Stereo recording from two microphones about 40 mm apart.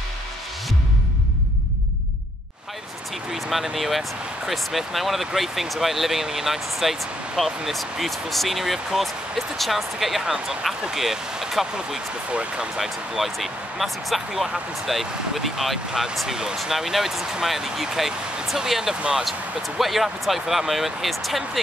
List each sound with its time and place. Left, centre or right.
3.3 s speech: centre
12.3 s speech: right
12.7 s speech: centre
16.3 s speech: centre
16.5 s speech: centre
18.9 s speech: right
19.8 s speech: centre